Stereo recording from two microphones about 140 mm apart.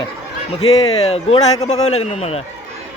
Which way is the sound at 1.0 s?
50° left (ahead or behind).